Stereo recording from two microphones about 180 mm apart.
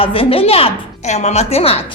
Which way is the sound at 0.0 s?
30° left (ahead or behind).